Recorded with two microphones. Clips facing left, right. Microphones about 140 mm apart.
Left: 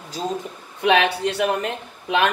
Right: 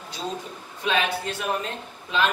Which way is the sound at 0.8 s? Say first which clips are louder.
Left 7 dB; 70° left (ahead or behind).